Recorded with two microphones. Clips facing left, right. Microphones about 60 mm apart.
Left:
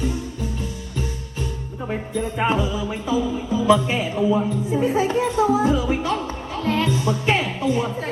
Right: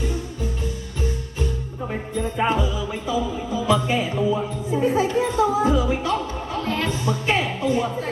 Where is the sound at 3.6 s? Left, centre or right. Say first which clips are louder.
Left 3 dB; left.